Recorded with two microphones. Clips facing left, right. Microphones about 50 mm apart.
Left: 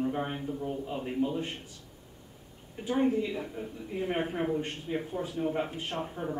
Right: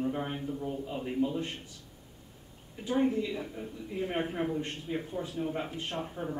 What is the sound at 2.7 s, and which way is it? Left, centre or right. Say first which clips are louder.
A man's voice: left 1 dB; centre.